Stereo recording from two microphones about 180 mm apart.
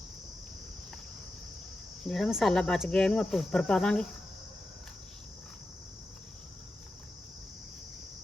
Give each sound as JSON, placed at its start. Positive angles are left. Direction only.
{"t": 2.0, "sound": "speech", "side_deg": 0}